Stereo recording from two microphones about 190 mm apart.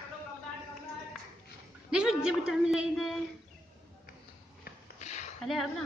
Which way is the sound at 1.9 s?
5° right (ahead or behind).